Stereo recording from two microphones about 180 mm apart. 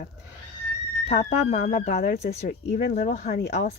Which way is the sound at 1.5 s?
45° left (ahead or behind).